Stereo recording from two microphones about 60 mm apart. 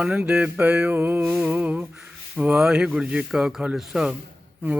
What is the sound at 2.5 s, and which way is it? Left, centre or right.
Speech, centre.